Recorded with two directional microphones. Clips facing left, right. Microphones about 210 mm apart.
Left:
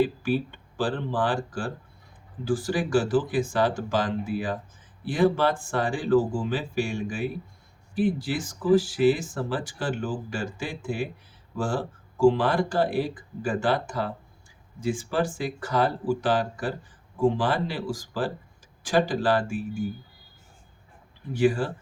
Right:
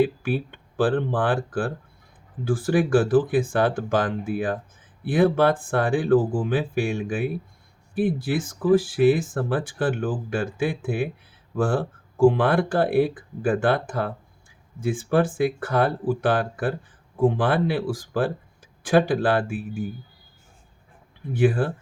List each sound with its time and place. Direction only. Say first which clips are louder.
0.0 s speech: right 2 dB; 55° right (ahead or behind)
21.3 s speech: right 2 dB; 55° right (ahead or behind)